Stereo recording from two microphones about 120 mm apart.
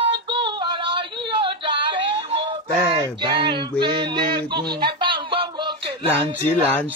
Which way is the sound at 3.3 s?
45° right (ahead or behind).